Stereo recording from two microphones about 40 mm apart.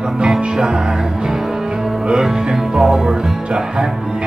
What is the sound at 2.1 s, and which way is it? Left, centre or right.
Music, centre.